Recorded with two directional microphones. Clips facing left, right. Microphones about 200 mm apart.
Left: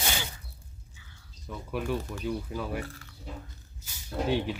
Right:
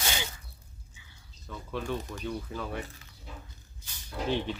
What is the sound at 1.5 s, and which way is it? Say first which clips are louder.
Speech: left 2 dB; 10° left (ahead or behind).